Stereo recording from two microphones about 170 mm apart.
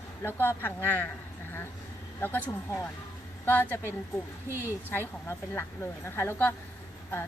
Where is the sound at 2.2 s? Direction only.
10° left (ahead or behind).